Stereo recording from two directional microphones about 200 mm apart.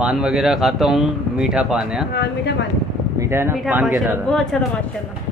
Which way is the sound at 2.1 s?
55° left (ahead or behind).